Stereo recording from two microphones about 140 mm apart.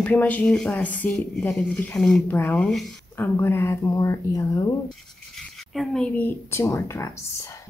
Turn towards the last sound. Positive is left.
turn(degrees=20)  # may be behind; listen again after turning